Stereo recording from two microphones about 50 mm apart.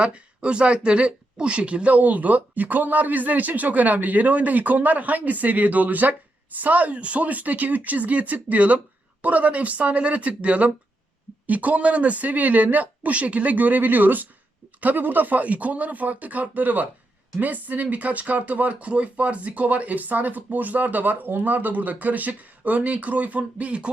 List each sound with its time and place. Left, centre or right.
0.0 s speech: right